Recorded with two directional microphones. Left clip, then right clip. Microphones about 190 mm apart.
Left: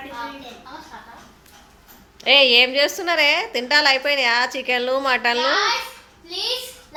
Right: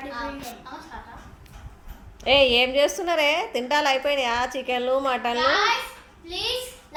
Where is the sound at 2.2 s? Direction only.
Centre (ahead or behind).